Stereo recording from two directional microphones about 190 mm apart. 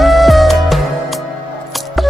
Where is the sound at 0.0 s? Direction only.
Centre (ahead or behind).